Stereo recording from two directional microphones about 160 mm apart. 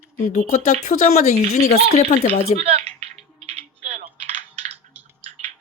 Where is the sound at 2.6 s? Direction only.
40° right (ahead or behind).